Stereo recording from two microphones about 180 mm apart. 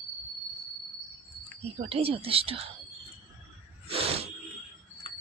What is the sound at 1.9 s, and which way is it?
Speech, 30° right (ahead or behind).